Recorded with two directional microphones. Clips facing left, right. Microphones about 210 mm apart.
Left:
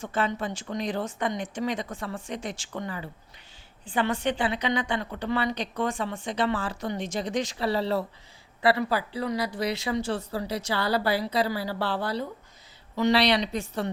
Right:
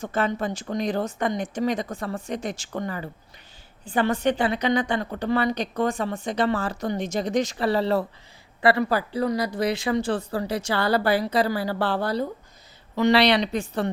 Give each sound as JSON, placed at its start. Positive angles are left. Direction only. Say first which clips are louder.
{"t": 0.0, "sound": "a woman's voice", "louder": "right 3 dB", "side_deg": -40}
{"t": 13.0, "sound": "speech", "louder": "right 3 dB", "side_deg": -60}